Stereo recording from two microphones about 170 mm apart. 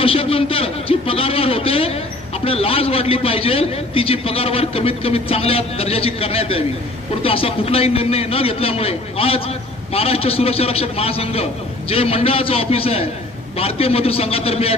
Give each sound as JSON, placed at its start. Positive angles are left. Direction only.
{"t": 0.0, "sound": "a man's voice", "side_deg": 35}